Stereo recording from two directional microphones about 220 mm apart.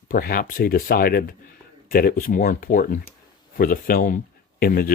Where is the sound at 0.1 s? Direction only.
40° left (ahead or behind).